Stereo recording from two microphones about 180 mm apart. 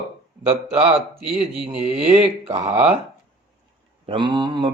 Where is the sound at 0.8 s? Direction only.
30° right (ahead or behind).